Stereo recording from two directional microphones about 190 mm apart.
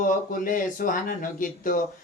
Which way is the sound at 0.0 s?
45° left (ahead or behind).